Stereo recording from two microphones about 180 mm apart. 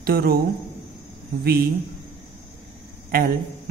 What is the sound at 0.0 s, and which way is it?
Speech, 60° right (ahead or behind).